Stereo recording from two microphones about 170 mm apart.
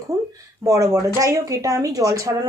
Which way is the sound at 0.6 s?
20° right (ahead or behind).